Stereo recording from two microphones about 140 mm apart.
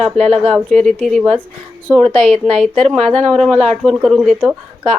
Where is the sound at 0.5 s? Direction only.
5° left (ahead or behind).